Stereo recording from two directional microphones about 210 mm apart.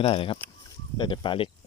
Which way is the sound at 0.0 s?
25° left (ahead or behind).